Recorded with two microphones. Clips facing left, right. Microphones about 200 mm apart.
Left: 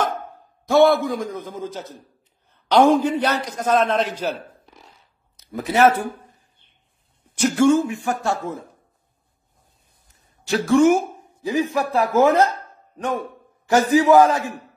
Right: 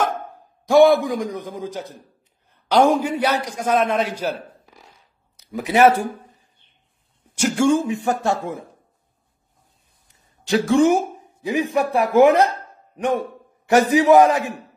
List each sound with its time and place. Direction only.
0.7 s a man's voice: 15° right (ahead or behind)
7.3 s a man's voice: 10° right (ahead or behind)
10.6 s a man's voice: 15° right (ahead or behind)